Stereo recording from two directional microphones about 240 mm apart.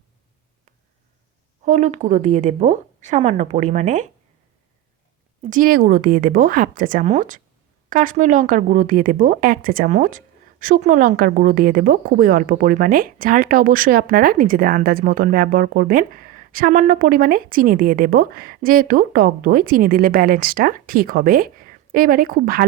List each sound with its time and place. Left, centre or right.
1.6 s a woman's voice: right
5.4 s speech: right